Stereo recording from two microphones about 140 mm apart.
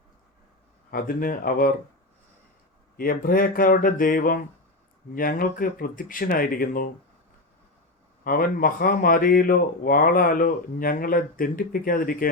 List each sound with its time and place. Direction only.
0.9 s speech: 90° left
3.0 s speech: 90° left
5.1 s speech: 90° left
8.2 s speech: 90° left